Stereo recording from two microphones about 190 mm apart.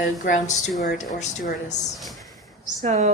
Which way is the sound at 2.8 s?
35° right (ahead or behind).